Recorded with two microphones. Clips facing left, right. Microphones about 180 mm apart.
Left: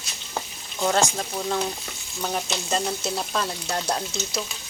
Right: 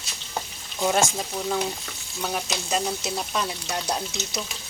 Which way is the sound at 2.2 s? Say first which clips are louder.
Left 1 dB; 5° left (ahead or behind).